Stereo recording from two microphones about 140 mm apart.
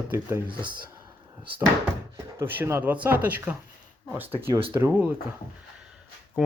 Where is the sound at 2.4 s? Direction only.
15° right (ahead or behind).